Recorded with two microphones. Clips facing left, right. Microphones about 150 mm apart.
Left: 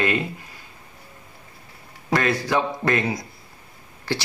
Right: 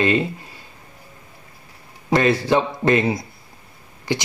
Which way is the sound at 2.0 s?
25° right (ahead or behind).